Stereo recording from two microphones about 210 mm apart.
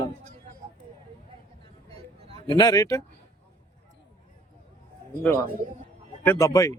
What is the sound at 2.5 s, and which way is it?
Speech, 20° left (ahead or behind).